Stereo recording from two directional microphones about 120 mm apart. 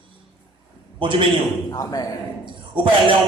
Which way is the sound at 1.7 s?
30° left (ahead or behind).